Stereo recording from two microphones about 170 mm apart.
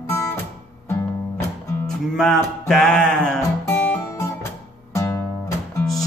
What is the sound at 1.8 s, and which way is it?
Music, 5° left (ahead or behind).